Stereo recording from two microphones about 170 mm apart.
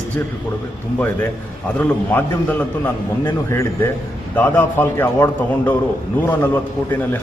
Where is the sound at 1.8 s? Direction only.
10° left (ahead or behind).